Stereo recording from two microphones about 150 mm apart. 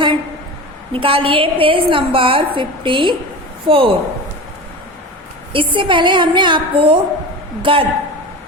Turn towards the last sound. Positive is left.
turn(degrees=-35)  # may be behind; listen again after turning